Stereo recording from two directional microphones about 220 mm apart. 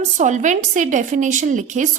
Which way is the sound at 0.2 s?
35° right (ahead or behind).